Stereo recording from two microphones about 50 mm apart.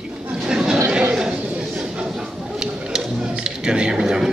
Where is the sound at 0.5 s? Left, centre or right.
Centre.